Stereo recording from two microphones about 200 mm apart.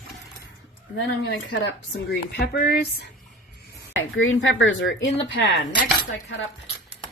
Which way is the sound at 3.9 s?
80° left.